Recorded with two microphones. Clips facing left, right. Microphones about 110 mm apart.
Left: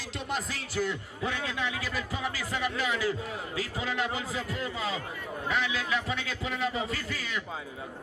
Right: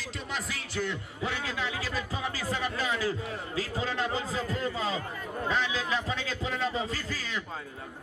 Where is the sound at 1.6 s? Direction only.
25° right (ahead or behind).